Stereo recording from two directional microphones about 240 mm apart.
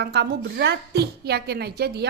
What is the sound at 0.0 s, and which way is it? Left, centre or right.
A woman's voice, right.